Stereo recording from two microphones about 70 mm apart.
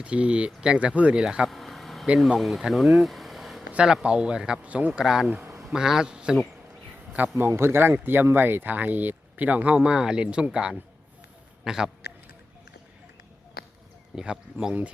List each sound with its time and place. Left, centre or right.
0.0 s speech: centre
1.5 s vehicle: centre
2.1 s speech: centre
3.7 s a sound: centre
4.0 s speech: centre
5.0 s a man's voice: centre
7.3 s a man's voice: right; by 11.9 s centre
14.2 s speech: centre